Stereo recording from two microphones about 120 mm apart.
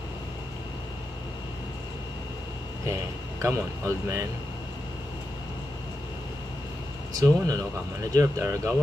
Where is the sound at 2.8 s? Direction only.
25° right (ahead or behind).